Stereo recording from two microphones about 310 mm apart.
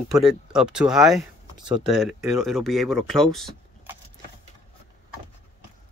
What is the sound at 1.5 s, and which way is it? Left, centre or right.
Speech, centre.